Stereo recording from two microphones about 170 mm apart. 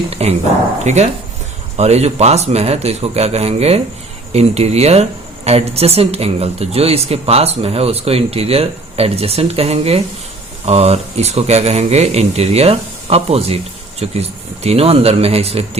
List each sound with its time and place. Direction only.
0.1 s speech: 40° right (ahead or behind)